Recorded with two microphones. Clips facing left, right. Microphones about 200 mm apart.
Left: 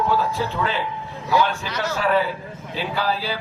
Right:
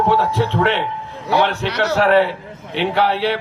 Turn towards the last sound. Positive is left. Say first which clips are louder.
# right 7 dB
turn(degrees=-75)  # may be behind; listen again after turning